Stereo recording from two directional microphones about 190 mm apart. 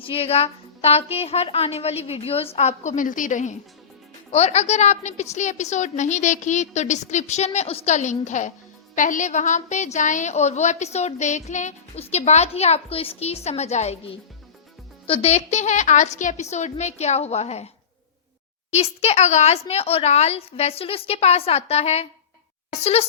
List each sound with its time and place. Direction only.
0.0 s a woman's voice: 30° left (ahead or behind)
18.7 s a woman's voice: 35° left (ahead or behind)